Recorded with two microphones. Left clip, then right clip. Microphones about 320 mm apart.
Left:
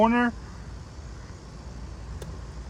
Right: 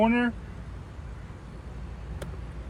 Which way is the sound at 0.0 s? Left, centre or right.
Left.